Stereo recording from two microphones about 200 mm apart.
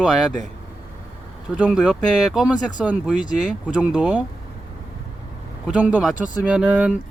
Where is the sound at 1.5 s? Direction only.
5° right (ahead or behind).